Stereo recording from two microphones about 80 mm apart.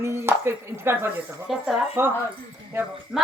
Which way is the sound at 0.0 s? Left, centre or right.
Right.